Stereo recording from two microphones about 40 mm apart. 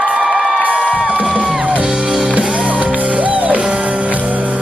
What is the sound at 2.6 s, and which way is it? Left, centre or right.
Music, right.